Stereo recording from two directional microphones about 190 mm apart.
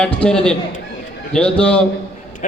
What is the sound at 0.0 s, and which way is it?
A man's voice, 5° left (ahead or behind).